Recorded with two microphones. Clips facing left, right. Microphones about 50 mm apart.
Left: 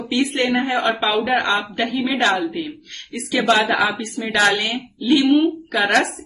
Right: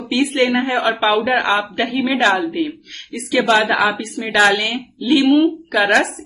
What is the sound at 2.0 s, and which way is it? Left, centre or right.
Speech, centre.